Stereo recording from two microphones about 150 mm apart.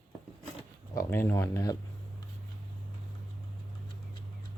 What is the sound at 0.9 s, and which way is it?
Speech, 15° left (ahead or behind).